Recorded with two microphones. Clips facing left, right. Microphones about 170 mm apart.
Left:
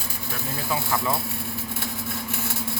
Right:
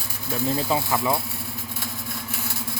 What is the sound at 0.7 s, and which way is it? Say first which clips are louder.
Speech: left 1 dB; 20° right (ahead or behind).